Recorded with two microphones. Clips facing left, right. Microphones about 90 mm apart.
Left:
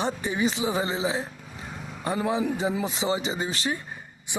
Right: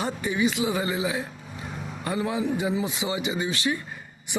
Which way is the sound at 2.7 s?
50° left (ahead or behind).